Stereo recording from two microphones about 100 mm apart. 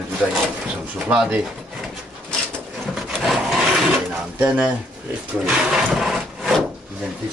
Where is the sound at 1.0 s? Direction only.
10° right (ahead or behind).